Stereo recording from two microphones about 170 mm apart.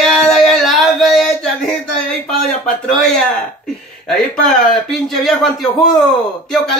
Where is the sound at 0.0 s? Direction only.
Centre (ahead or behind).